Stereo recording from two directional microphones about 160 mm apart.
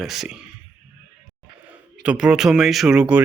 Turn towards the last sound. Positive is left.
turn(degrees=-5)  # may be behind; listen again after turning